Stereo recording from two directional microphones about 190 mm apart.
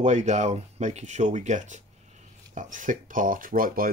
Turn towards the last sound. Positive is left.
turn(degrees=-50)  # may be behind; listen again after turning